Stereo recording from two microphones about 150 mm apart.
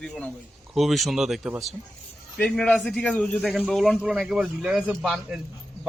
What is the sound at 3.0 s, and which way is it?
A man's voice, 10° left (ahead or behind).